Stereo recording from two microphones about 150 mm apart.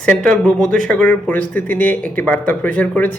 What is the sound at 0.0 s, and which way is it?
Speech, 5° left (ahead or behind).